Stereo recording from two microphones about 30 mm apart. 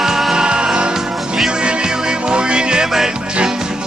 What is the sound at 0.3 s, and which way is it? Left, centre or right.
Music, right.